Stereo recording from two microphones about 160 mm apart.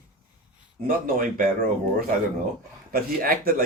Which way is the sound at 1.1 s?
60° right (ahead or behind).